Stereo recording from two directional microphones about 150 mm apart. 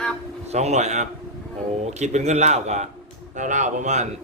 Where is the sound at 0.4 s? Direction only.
45° right (ahead or behind).